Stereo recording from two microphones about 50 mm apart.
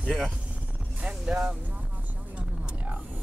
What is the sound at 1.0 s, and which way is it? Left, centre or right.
Speech, centre.